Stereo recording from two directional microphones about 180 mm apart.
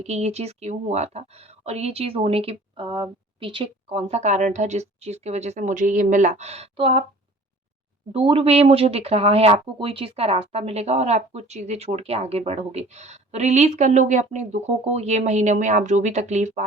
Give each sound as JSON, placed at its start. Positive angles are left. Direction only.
{"t": 0.0, "sound": "a woman's voice", "side_deg": -40}
{"t": 8.1, "sound": "a woman's voice", "side_deg": -30}